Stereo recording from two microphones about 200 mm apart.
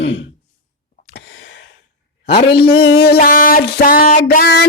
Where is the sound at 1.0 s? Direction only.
60° left (ahead or behind).